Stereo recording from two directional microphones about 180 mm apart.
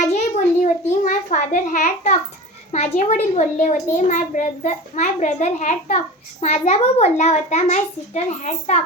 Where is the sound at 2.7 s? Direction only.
40° left (ahead or behind).